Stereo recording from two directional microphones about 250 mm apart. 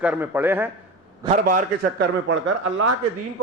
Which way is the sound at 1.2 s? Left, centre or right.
Right.